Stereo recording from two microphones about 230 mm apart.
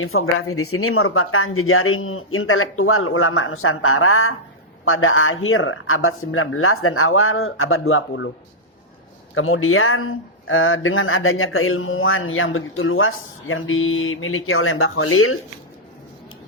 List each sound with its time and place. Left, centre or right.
0.0 s speech: left
9.3 s speech: left